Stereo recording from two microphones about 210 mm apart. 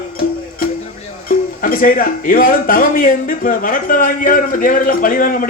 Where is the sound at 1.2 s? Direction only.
45° left (ahead or behind).